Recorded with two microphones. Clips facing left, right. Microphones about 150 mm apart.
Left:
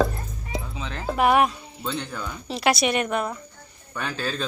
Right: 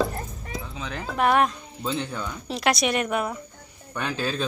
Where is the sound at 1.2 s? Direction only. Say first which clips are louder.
Left 1 dB; 10° left (ahead or behind).